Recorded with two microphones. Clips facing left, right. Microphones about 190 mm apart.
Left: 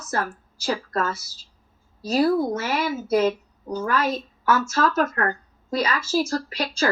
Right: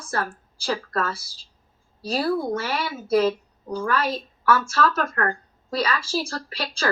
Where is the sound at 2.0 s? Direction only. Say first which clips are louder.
Left 4 dB; 30° right (ahead or behind).